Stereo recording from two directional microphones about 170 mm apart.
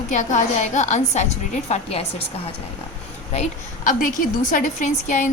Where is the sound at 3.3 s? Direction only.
45° left (ahead or behind).